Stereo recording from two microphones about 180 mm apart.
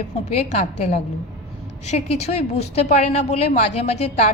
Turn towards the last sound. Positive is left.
turn(degrees=35)  # may be behind; listen again after turning